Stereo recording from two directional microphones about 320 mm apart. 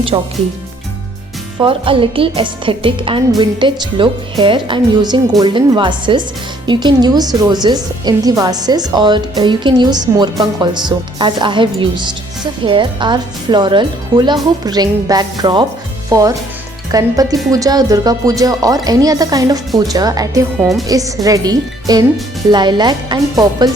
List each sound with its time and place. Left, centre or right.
0.1 s a woman's voice: centre
1.5 s a woman's voice: centre